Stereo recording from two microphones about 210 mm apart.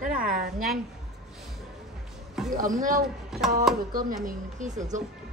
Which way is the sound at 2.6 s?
40° right (ahead or behind).